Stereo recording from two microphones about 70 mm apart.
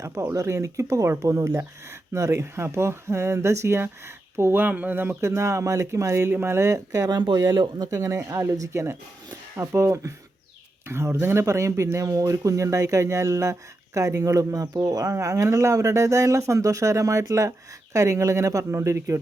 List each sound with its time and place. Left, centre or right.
0.0 s speech: right